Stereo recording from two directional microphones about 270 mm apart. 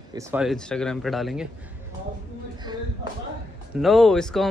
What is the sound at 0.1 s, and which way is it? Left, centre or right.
A man's voice, centre.